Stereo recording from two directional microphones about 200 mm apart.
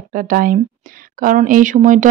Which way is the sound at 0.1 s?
45° right (ahead or behind).